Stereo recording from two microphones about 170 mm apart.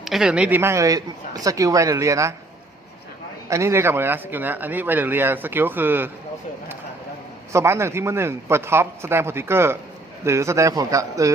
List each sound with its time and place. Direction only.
0.0 s speech: centre (ahead or behind); by 2.3 s 20° right (ahead or behind)
3.5 s speech: 15° right (ahead or behind)
7.5 s a man's voice: 15° right (ahead or behind)